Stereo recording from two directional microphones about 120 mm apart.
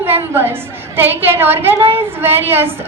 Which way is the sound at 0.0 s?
20° right (ahead or behind).